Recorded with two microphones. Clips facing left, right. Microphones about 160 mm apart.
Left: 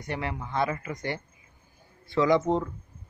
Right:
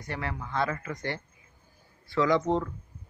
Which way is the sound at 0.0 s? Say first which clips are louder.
Left 2 dB; 20° left (ahead or behind).